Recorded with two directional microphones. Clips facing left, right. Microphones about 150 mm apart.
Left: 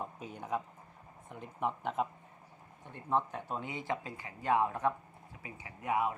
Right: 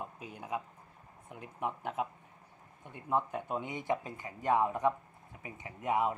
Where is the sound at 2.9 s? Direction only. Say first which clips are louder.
Even; 10° right (ahead or behind).